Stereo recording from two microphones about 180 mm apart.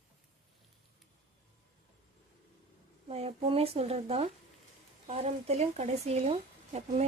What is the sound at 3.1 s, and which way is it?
Speech, 35° right (ahead or behind).